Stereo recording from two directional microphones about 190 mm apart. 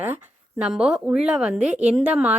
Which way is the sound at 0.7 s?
5° right (ahead or behind).